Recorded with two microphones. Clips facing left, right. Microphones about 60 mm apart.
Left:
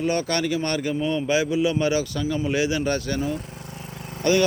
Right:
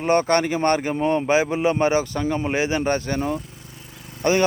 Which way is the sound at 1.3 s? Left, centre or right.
Right.